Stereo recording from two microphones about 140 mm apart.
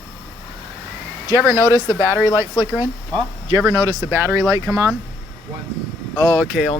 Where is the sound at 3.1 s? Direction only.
30° right (ahead or behind).